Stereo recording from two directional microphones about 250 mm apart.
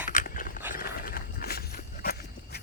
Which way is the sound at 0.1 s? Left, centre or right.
Left.